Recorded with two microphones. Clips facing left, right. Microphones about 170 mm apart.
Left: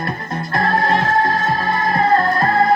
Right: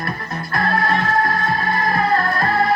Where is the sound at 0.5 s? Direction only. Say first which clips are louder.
Left 2 dB; 25° left (ahead or behind).